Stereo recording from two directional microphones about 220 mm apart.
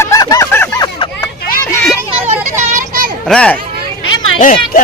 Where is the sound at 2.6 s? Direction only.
40° right (ahead or behind).